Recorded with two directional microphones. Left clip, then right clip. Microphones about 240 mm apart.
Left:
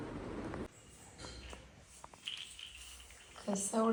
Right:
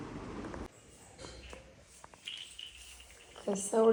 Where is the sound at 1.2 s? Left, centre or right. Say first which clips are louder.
Right 1 dB; centre.